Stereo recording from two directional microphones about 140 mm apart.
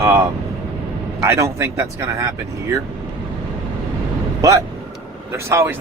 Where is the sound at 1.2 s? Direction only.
20° right (ahead or behind).